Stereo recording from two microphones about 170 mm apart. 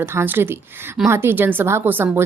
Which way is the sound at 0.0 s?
15° right (ahead or behind).